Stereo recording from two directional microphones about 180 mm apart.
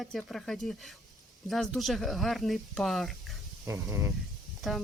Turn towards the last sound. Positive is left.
turn(degrees=0)  # may be behind; listen again after turning